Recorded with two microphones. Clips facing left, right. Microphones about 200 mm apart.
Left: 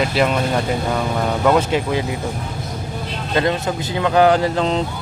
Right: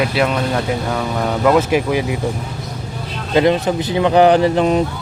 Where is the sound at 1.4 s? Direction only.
10° right (ahead or behind).